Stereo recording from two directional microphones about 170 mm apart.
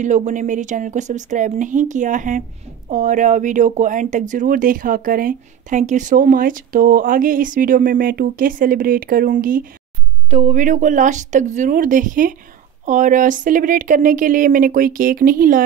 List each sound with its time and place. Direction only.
0.0 s speech: 45° right (ahead or behind)
10.3 s speech: 40° right (ahead or behind)